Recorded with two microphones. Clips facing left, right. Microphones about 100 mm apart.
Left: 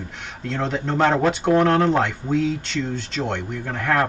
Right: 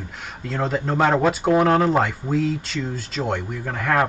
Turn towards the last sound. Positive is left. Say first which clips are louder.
# even
turn(degrees=-5)  # may be behind; listen again after turning